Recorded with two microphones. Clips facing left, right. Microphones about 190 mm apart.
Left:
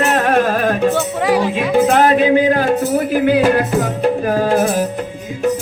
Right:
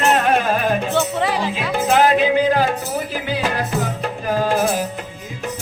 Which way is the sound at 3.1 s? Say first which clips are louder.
Left 13 dB; 55° left (ahead or behind).